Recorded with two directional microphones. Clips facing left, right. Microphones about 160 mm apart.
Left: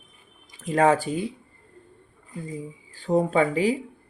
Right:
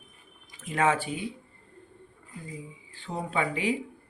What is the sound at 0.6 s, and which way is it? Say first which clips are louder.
Speech: left 6 dB; 35° left (ahead or behind).